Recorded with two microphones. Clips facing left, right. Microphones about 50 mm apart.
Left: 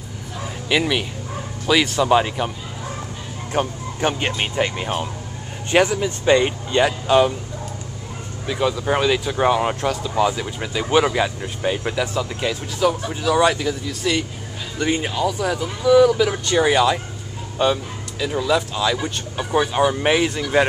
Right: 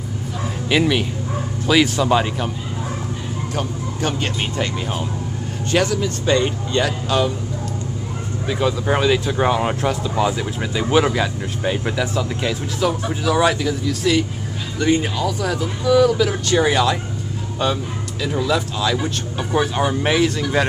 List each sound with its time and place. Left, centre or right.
0.7 s speech: centre
3.6 s speech: left
4.2 s speech: left
8.5 s speech: centre